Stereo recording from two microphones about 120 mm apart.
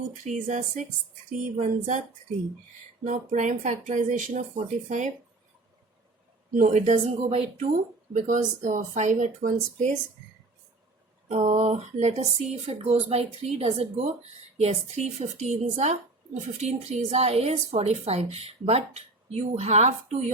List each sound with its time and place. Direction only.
0.1 s speech: 90° right
3.0 s speech: 90° right
6.5 s speech: 90° right; by 7.7 s 65° right (ahead or behind)
8.1 s speech: 90° right
11.3 s a woman's voice: 70° right (ahead or behind)